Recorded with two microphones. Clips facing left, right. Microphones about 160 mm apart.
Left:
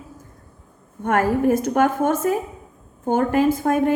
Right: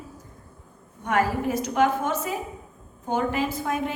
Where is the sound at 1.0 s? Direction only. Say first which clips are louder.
Left 6 dB; 50° left (ahead or behind).